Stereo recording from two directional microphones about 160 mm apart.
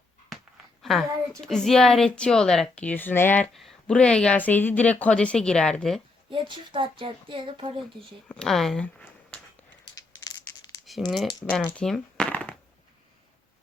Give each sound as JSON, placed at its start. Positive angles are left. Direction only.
{"t": 0.3, "sound": "speech", "side_deg": 0}
{"t": 6.3, "sound": "speech", "side_deg": -30}
{"t": 8.3, "sound": "a sound", "side_deg": 5}
{"t": 9.8, "sound": "crushing", "side_deg": 25}
{"t": 10.8, "sound": "speech", "side_deg": 0}
{"t": 11.4, "sound": "a sound", "side_deg": 5}